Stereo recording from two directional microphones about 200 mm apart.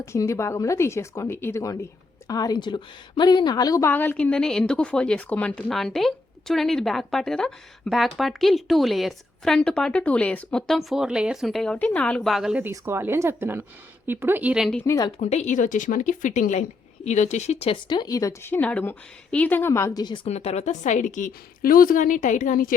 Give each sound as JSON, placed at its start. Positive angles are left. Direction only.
{"t": 0.0, "sound": "a woman's voice", "side_deg": 15}
{"t": 14.8, "sound": "a woman's voice", "side_deg": 20}
{"t": 15.2, "sound": "a woman's voice", "side_deg": 35}